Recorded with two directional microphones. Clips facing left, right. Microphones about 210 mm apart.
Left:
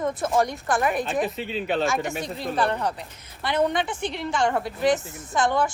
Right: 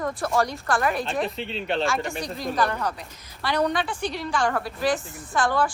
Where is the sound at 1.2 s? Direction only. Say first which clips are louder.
Left 2 dB; centre (ahead or behind).